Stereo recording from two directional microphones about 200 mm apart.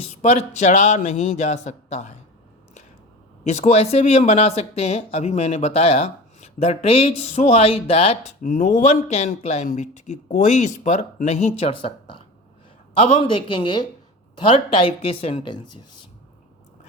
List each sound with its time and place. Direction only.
0.2 s speech: 35° left (ahead or behind)
3.6 s speech: 35° left (ahead or behind)
8.4 s a woman's voice: 40° left (ahead or behind)